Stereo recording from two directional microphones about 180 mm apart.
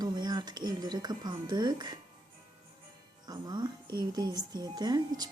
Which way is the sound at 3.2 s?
20° right (ahead or behind).